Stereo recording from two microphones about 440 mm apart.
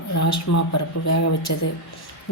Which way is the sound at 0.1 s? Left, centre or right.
Left.